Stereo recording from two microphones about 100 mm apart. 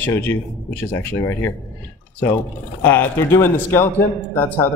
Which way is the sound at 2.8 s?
20° left (ahead or behind).